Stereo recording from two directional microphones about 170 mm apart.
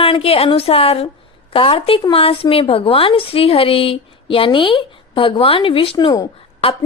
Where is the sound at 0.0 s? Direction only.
35° left (ahead or behind).